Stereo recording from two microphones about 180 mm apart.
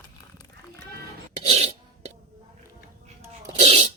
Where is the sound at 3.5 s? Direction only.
35° right (ahead or behind).